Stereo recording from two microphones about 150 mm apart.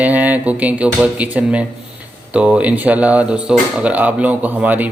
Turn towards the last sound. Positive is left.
turn(degrees=-10)  # may be behind; listen again after turning